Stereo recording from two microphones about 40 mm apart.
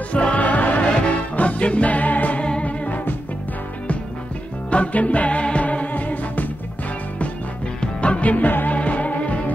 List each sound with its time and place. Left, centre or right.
0.1 s music: left
4.6 s music: left
7.8 s music: left
8.7 s music: left